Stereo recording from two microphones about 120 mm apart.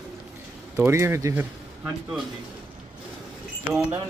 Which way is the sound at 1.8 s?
5° right (ahead or behind).